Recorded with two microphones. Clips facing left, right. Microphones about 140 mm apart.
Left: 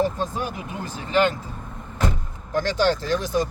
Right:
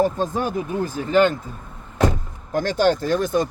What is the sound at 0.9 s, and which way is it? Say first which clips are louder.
Speech: right 3 dB; 45° right (ahead or behind).